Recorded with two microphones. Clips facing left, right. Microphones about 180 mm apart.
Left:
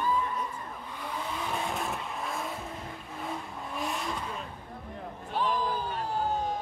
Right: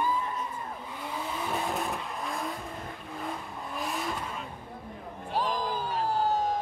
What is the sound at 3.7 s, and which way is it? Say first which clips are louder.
Vehicle: even; centre (ahead or behind).